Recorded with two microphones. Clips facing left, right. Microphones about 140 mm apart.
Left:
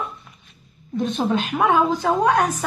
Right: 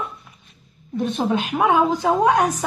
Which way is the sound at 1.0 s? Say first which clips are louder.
Even; 5° right (ahead or behind).